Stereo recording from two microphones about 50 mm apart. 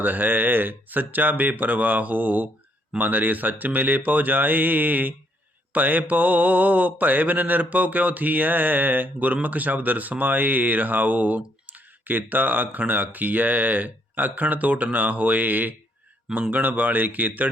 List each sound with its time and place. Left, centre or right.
0.0 s mantra: right